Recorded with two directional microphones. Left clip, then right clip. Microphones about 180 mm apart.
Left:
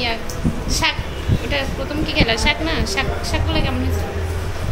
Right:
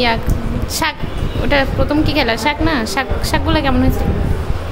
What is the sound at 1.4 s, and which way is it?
A woman's voice, 45° right (ahead or behind).